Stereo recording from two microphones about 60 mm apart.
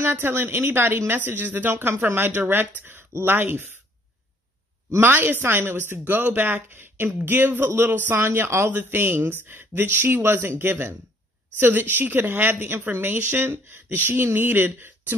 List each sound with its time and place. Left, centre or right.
0.0 s a woman's voice: right
5.0 s a woman's voice: right